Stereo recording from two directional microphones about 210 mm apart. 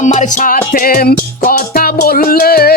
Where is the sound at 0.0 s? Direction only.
35° left (ahead or behind).